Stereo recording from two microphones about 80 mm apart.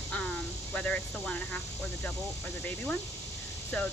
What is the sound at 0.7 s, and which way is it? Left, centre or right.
Speech, centre.